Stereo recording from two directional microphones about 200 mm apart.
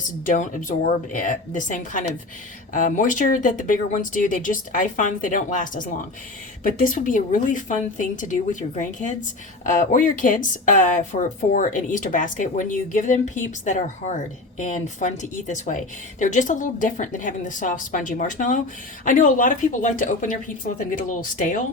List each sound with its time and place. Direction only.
0.3 s speech: 40° left (ahead or behind)